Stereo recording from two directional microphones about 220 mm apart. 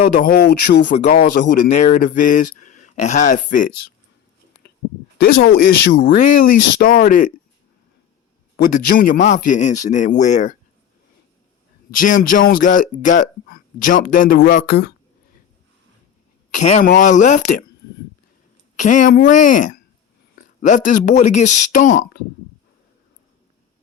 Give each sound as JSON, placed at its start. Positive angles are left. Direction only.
{"t": 0.0, "sound": "speech", "side_deg": 40}
{"t": 0.9, "sound": "speech", "side_deg": 30}
{"t": 4.6, "sound": "a sound", "side_deg": 50}
{"t": 5.5, "sound": "speech", "side_deg": 40}
{"t": 5.9, "sound": "speech", "side_deg": 55}
{"t": 6.1, "sound": "speech", "side_deg": 35}
{"t": 8.6, "sound": "speech", "side_deg": 40}
{"t": 11.9, "sound": "speech", "side_deg": 35}
{"t": 16.5, "sound": "speech", "side_deg": 35}
{"t": 18.8, "sound": "speech", "side_deg": 35}